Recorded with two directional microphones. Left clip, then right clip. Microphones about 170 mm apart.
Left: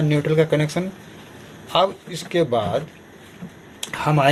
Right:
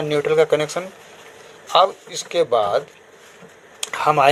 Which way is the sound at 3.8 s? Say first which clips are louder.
Right 4 dB; 40° right (ahead or behind).